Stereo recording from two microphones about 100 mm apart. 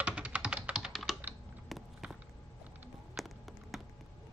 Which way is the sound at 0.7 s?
Centre (ahead or behind).